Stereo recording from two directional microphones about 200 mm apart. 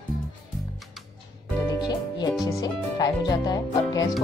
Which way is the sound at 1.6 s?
20° left (ahead or behind).